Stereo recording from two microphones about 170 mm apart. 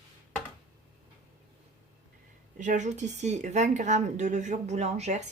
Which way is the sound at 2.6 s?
45° right (ahead or behind).